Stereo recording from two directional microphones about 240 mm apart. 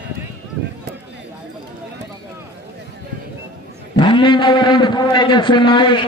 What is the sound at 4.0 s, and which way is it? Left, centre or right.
A man's voice, centre.